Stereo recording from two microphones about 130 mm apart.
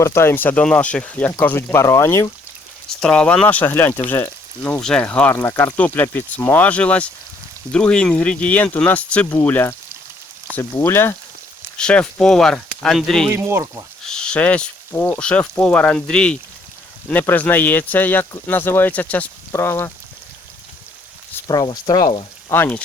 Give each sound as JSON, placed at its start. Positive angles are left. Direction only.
{"t": 0.0, "sound": "speech", "side_deg": 20}
{"t": 3.0, "sound": "speech", "side_deg": 5}
{"t": 13.3, "sound": "speech", "side_deg": -20}
{"t": 14.1, "sound": "speech", "side_deg": 5}
{"t": 21.4, "sound": "speech", "side_deg": 30}
{"t": 22.4, "sound": "speech", "side_deg": 15}